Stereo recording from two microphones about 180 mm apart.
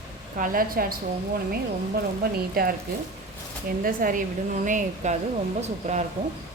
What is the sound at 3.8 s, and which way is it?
Speech, 50° right (ahead or behind).